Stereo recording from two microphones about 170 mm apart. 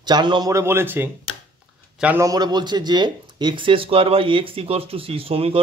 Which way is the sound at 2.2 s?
25° right (ahead or behind).